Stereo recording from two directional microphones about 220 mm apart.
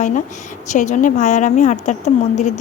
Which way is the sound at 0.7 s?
35° left (ahead or behind).